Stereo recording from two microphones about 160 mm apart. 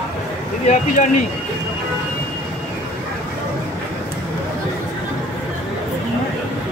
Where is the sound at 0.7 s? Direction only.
55° left (ahead or behind).